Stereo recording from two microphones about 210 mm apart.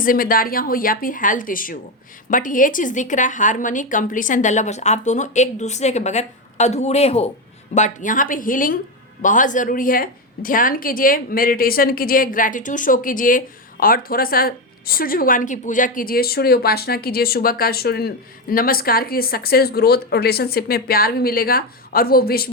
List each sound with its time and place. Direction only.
0.0 s a woman's voice: 40° left (ahead or behind)